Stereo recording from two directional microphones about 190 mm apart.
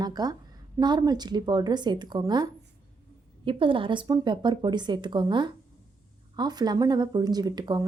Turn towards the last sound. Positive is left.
turn(degrees=-20)  # may be behind; listen again after turning